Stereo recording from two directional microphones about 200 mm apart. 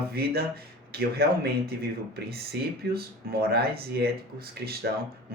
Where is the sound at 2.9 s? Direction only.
50° right (ahead or behind).